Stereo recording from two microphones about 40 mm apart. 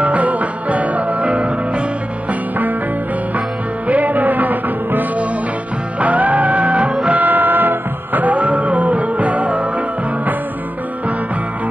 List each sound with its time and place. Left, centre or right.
0.0 s music: right
3.3 s music: right
7.1 s music: right